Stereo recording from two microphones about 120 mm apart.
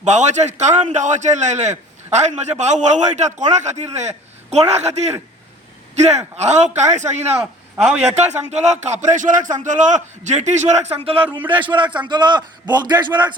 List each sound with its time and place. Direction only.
0.0 s a man's voice: 80° right
7.3 s a man's voice: 10° right (ahead or behind)
8.1 s a man's voice: 70° right (ahead or behind)
11.3 s a man's voice: 15° right (ahead or behind)
11.6 s a man's voice: 40° right (ahead or behind)